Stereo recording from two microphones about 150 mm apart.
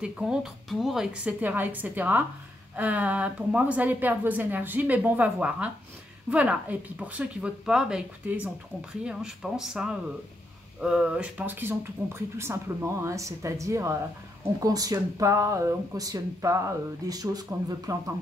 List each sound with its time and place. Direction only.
0.0 s speech: 5° right (ahead or behind); by 18.1 s 20° right (ahead or behind)